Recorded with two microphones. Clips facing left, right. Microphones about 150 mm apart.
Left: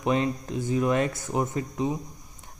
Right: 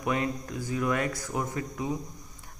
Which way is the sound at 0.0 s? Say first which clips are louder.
Left 4 dB; 25° left (ahead or behind).